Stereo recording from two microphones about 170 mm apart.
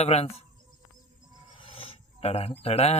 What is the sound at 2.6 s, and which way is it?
Speech, 35° left (ahead or behind).